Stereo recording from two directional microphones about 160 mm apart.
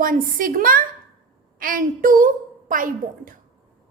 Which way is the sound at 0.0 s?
60° right (ahead or behind).